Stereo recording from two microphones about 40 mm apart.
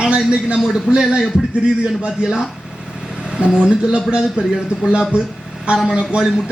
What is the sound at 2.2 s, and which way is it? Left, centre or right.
Speech, centre.